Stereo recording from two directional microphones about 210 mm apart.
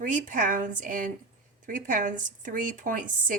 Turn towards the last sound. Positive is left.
turn(degrees=-40)  # may be behind; listen again after turning